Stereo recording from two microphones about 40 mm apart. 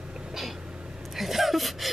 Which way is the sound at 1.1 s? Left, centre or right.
Centre.